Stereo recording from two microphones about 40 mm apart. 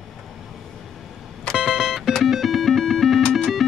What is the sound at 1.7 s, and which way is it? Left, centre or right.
Music, centre.